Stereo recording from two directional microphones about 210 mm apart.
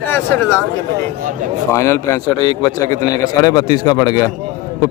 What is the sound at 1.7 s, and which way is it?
Speech, 15° left (ahead or behind).